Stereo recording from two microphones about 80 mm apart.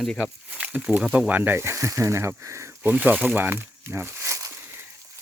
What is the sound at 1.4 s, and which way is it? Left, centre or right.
Speech, right.